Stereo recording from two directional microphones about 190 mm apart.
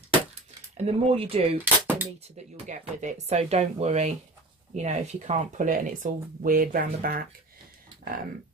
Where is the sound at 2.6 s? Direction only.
40° right (ahead or behind).